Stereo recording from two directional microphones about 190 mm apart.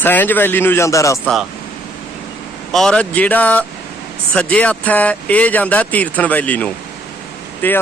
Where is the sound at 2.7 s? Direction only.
5° left (ahead or behind).